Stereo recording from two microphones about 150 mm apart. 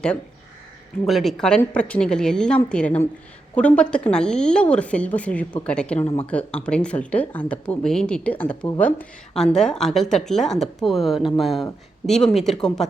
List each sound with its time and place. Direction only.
1.0 s a woman's voice: centre (ahead or behind)